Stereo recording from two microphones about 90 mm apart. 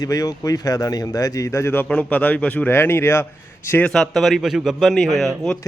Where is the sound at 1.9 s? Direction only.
15° left (ahead or behind).